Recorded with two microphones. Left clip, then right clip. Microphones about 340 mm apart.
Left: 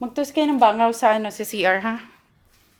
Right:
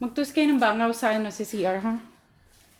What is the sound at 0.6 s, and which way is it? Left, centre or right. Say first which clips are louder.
A woman's voice: left 7 dB; left.